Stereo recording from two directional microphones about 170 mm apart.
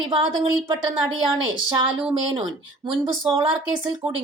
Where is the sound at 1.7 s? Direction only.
30° right (ahead or behind).